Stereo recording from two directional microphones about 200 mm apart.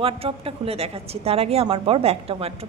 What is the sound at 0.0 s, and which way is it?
A woman's voice, 30° right (ahead or behind).